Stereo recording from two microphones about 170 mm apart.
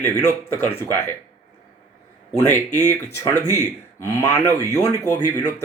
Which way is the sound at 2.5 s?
10° left (ahead or behind).